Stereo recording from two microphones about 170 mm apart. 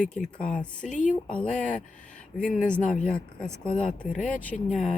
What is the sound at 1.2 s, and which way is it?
Speech, 5° left (ahead or behind).